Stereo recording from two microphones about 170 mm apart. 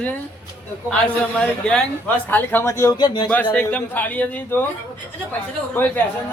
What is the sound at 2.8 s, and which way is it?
Speech, 25° left (ahead or behind).